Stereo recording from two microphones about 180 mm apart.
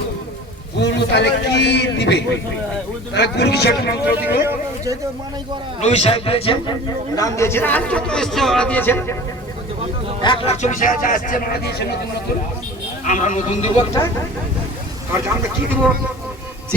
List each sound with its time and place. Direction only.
0.8 s a man's voice: 70° left (ahead or behind)
5.8 s a man's voice: 35° left (ahead or behind)
7.2 s a man's voice: 15° left (ahead or behind)
10.2 s a man's voice: 30° left (ahead or behind); by 11.9 s 65° left (ahead or behind)
13.1 s a man's voice: 45° left (ahead or behind)
13.7 s speech: 20° left (ahead or behind)
15.1 s speech: 10° right (ahead or behind)